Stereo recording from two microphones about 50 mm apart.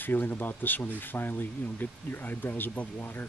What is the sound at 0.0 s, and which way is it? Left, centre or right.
Speech, left.